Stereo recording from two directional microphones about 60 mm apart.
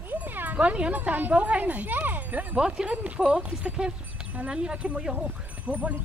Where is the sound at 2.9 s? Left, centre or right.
Right.